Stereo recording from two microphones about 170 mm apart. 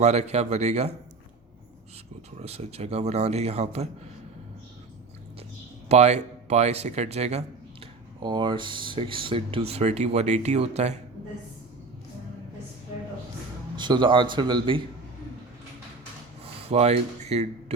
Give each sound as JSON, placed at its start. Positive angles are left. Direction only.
{"t": 0.0, "sound": "speech", "side_deg": -40}
{"t": 2.4, "sound": "speech", "side_deg": -40}
{"t": 5.9, "sound": "speech", "side_deg": -40}
{"t": 8.2, "sound": "speech", "side_deg": -25}
{"t": 13.7, "sound": "a man's voice", "side_deg": -25}
{"t": 16.5, "sound": "speech", "side_deg": -35}